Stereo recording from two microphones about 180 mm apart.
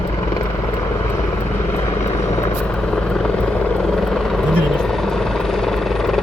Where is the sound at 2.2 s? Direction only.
15° left (ahead or behind).